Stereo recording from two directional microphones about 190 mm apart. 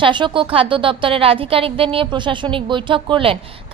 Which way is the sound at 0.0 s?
25° right (ahead or behind).